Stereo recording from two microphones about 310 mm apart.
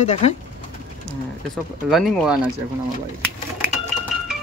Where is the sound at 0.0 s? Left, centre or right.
Centre.